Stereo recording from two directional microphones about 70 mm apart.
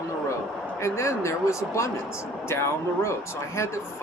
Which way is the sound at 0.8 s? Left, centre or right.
Left.